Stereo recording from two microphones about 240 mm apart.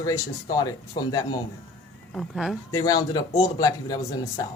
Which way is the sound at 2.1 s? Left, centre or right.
Centre.